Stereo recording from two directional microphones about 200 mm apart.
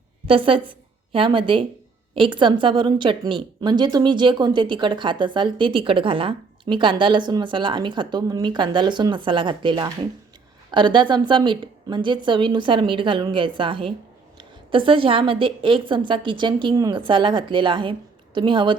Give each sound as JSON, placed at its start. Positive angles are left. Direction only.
{"t": 0.3, "sound": "a woman's voice", "side_deg": -25}